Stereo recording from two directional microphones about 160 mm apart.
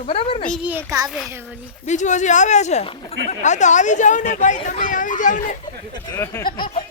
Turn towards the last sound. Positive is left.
turn(degrees=65)  # may be behind; listen again after turning